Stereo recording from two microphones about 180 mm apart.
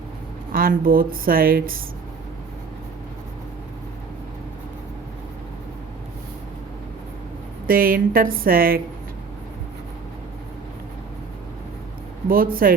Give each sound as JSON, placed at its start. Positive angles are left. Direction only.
{"t": 0.5, "sound": "a woman's voice", "side_deg": -55}
{"t": 7.7, "sound": "a woman's voice", "side_deg": -55}
{"t": 12.3, "sound": "a woman's voice", "side_deg": -55}